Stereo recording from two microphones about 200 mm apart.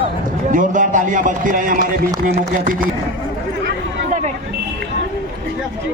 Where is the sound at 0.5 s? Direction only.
40° right (ahead or behind).